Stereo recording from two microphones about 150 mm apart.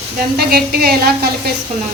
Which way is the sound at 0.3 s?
90° right.